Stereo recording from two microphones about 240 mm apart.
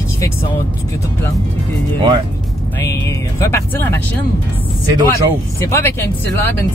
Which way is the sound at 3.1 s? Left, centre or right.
Centre.